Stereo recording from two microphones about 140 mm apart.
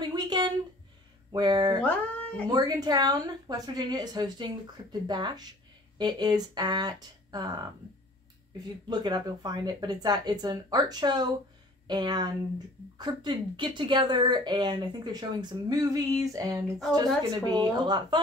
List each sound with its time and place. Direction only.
0.0 s a sound: 30° right (ahead or behind)
1.3 s speech: 30° right (ahead or behind)
1.8 s cat: 10° left (ahead or behind)
2.5 s speech: 30° right (ahead or behind)
8.8 s speech: 30° right (ahead or behind)